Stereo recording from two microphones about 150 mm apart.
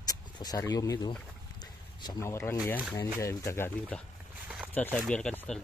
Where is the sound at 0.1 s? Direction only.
25° left (ahead or behind).